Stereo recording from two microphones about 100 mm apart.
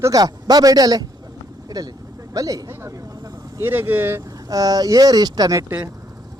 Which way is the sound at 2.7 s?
25° right (ahead or behind).